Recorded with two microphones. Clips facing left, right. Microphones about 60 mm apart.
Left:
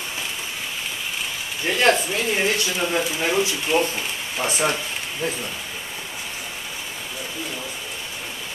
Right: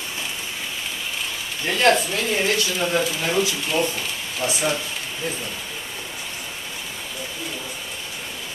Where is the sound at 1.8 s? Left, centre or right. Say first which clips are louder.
Right 1 dB; left.